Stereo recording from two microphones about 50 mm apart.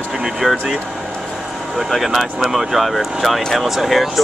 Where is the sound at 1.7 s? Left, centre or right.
Centre.